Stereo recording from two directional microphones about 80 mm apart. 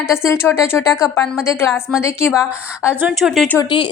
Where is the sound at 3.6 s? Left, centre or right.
Left.